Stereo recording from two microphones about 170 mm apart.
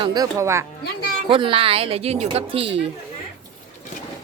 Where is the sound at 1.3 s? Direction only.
30° right (ahead or behind).